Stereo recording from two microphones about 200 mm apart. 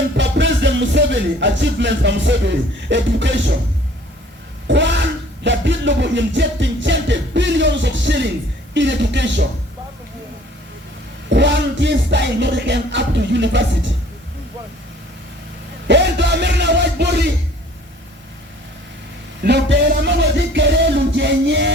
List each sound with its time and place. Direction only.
0.2 s music: 65° right (ahead or behind)
4.7 s a sound: 60° right (ahead or behind)
8.7 s music: 60° right (ahead or behind)
11.3 s music: 60° right (ahead or behind)
15.9 s music: 60° right (ahead or behind)
19.4 s music: 55° right (ahead or behind)